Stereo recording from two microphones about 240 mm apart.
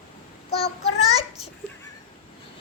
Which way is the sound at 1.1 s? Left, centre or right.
Left.